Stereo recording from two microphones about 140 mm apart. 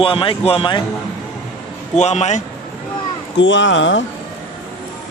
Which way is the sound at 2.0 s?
55° left (ahead or behind).